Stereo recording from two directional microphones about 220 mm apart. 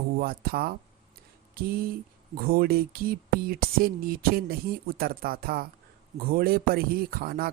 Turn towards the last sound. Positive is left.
turn(degrees=-45)  # may be behind; listen again after turning